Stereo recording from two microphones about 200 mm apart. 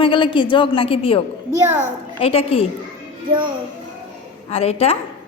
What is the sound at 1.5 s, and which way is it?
Speech, 10° right (ahead or behind).